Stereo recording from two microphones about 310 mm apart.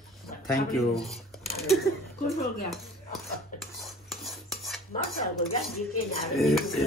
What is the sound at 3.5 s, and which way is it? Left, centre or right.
Cutlery, left.